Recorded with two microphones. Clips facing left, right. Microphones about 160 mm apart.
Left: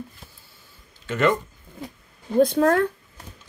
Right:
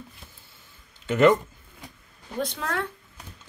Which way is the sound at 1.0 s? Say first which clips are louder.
Right 3 dB; 20° right (ahead or behind).